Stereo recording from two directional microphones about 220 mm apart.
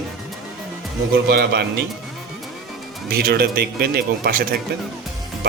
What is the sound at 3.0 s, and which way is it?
A man's voice, 40° right (ahead or behind).